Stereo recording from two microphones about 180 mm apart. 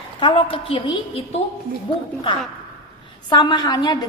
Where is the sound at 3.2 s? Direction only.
25° left (ahead or behind).